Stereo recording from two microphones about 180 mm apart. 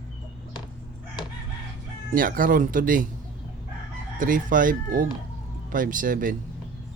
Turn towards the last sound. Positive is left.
turn(degrees=-50)  # may be behind; listen again after turning